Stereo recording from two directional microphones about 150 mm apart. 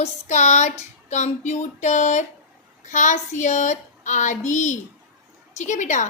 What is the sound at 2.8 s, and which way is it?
A woman's voice, 55° left (ahead or behind).